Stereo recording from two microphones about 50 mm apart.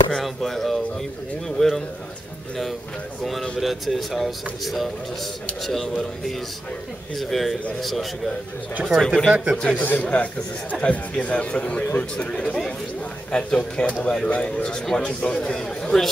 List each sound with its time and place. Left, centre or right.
0.2 s a man's voice: centre
3.5 s speech: centre
8.9 s a man's voice: centre
9.3 s speech: centre
9.8 s a man's voice: left; by 16.1 s centre